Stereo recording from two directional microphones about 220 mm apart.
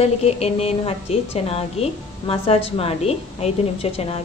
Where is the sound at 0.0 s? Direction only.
25° left (ahead or behind).